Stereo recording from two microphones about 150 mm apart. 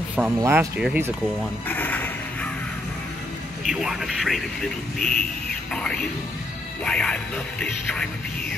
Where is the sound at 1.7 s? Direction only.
10° left (ahead or behind).